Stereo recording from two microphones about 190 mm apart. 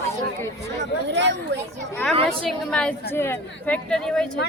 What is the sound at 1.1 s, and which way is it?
Speech, 65° right (ahead or behind).